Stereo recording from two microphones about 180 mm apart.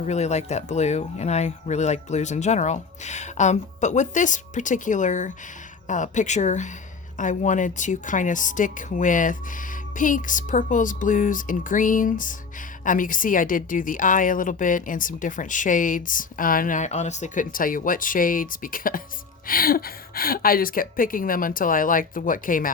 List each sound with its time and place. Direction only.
0.0 s a woman's voice: 40° left (ahead or behind)